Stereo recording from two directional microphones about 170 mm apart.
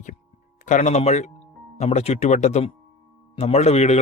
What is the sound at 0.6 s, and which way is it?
Speech, 45° left (ahead or behind).